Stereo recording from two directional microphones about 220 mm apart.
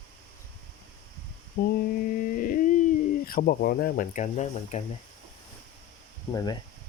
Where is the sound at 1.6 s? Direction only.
45° left (ahead or behind).